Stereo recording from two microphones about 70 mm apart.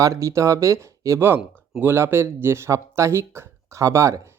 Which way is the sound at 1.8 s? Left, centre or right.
Right.